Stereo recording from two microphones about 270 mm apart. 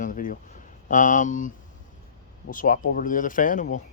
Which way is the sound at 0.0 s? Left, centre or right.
Left.